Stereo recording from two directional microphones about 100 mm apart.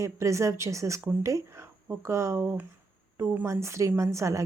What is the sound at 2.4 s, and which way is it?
A woman's voice, 20° right (ahead or behind).